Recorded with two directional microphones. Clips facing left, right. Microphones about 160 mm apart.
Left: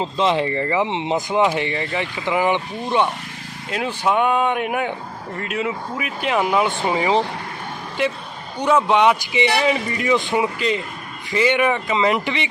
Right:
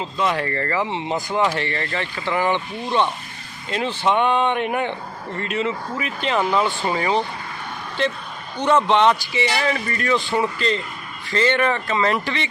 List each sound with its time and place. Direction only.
0.0 s speech: 25° left (ahead or behind)